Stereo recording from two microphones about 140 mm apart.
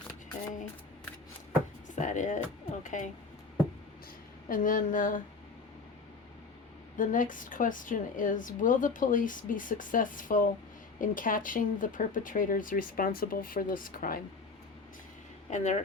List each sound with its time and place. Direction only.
2.0 s music: 65° left (ahead or behind)
2.8 s speech: 65° left (ahead or behind)
4.4 s a woman's voice: 75° left (ahead or behind)
6.9 s a woman's voice: 70° left (ahead or behind)
15.4 s speech: 55° left (ahead or behind)